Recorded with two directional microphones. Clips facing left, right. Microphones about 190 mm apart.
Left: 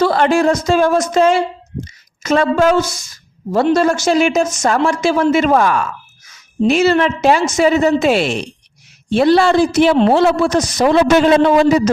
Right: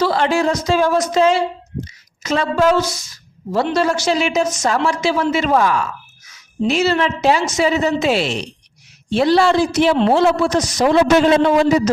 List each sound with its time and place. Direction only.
0.0 s a man's voice: 50° left (ahead or behind)